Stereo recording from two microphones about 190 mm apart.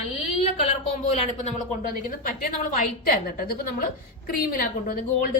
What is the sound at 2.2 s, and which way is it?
A woman's voice, 45° left (ahead or behind).